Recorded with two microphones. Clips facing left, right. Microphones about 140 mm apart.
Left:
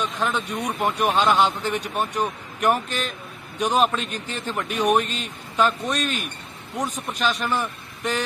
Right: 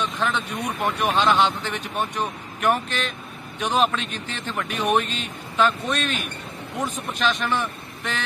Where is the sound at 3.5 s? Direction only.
40° left (ahead or behind).